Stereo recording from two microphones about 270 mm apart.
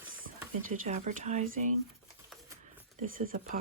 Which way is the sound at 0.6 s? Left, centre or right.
Right.